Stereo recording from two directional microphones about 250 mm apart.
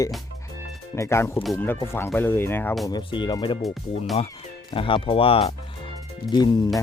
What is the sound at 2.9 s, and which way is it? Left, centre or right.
Speech, centre.